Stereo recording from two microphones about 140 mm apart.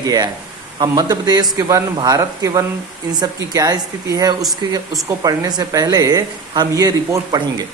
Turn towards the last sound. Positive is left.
turn(degrees=-30)  # may be behind; listen again after turning